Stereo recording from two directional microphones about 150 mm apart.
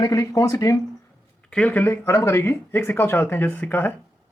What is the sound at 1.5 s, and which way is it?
Speech, 10° left (ahead or behind).